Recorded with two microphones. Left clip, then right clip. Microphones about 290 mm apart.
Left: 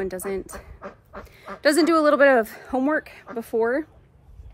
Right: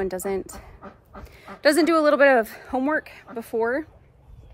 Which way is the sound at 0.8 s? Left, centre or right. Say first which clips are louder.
Left 4 dB; left.